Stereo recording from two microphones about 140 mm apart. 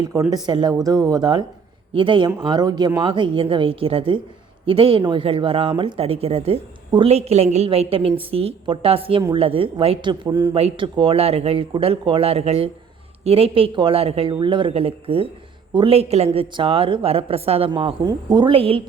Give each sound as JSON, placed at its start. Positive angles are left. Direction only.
{"t": 0.0, "sound": "speech", "side_deg": -25}
{"t": 17.7, "sound": "speech", "side_deg": -35}